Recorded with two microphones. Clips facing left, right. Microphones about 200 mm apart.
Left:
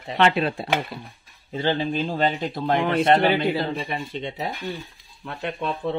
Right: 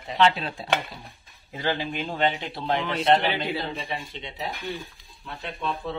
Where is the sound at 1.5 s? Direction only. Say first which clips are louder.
Left 5 dB; 25° left (ahead or behind); by 4.4 s 55° left (ahead or behind).